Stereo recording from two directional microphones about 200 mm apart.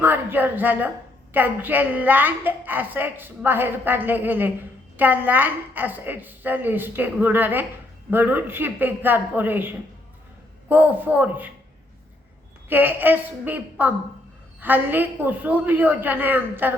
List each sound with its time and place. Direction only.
0.0 s a woman's voice: 10° right (ahead or behind)
12.6 s a woman's voice: 10° right (ahead or behind)